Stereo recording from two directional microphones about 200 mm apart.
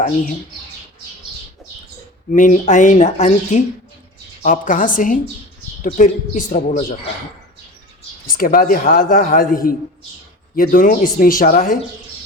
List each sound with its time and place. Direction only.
2.3 s speech: 40° left (ahead or behind)
8.4 s speech: 45° left (ahead or behind)